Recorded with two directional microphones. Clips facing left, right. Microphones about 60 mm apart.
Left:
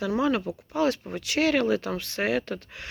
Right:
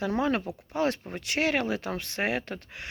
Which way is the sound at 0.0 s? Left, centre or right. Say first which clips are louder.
Left 2 dB; right.